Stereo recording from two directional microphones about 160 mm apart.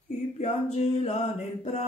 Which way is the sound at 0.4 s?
45° left (ahead or behind).